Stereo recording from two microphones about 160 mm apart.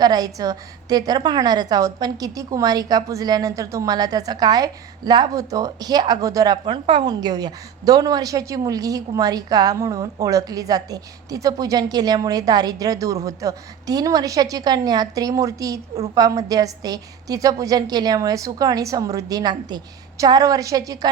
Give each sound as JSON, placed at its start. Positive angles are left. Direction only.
{"t": 0.0, "sound": "a woman's voice", "side_deg": -25}